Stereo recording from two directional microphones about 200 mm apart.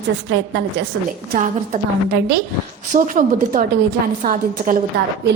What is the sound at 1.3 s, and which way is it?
Speech, 40° right (ahead or behind).